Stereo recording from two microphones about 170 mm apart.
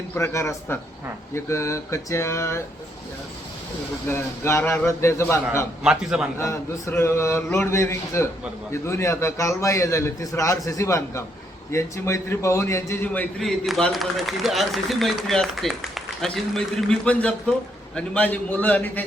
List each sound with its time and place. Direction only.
0.1 s a man's voice: 15° left (ahead or behind)
4.1 s a man's voice: 15° left (ahead or behind)
5.8 s a man's voice: 5° right (ahead or behind)
6.4 s a man's voice: 15° left (ahead or behind)
13.4 s a man's voice: centre (ahead or behind)